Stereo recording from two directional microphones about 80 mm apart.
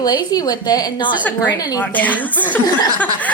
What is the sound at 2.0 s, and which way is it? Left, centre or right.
Speech, centre.